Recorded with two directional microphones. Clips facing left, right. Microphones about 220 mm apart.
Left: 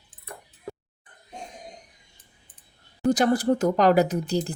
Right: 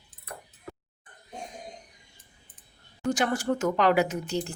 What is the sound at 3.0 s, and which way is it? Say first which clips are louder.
A woman's voice: left 6 dB; 35° left (ahead or behind).